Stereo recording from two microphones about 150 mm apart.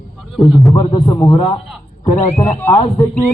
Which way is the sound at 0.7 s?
35° left (ahead or behind).